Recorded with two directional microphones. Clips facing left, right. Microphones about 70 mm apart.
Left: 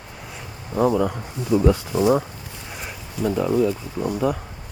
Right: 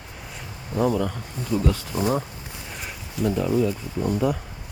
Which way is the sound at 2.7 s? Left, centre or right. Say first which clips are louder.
Left 2 dB; centre.